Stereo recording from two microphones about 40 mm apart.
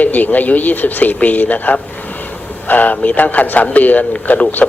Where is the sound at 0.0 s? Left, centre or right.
Left.